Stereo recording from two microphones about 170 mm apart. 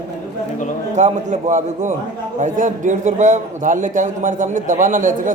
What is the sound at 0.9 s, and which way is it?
A man's voice, 45° right (ahead or behind).